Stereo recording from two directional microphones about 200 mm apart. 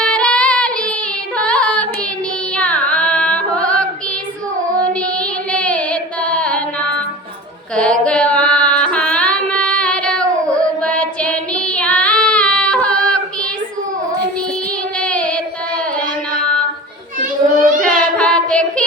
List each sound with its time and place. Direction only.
0.0 s singing: 5° left (ahead or behind)
1.4 s carnatic music: 5° left (ahead or behind)
4.9 s child singing: 5° left (ahead or behind)
7.8 s carnatic music: 5° left (ahead or behind)
10.6 s child singing: 5° left (ahead or behind)
14.9 s child singing: 5° left (ahead or behind)
17.6 s child singing: 40° right (ahead or behind)
18.2 s child singing: 5° left (ahead or behind)